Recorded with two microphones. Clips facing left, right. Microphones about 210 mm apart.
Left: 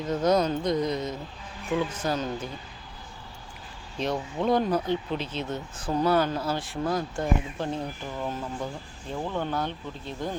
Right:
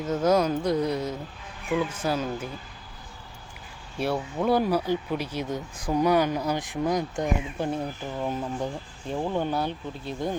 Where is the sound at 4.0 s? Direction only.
10° right (ahead or behind).